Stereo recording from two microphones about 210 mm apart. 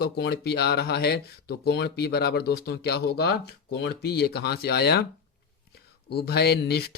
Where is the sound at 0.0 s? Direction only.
50° left (ahead or behind).